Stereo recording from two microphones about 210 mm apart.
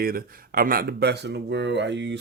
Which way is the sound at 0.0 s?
45° right (ahead or behind).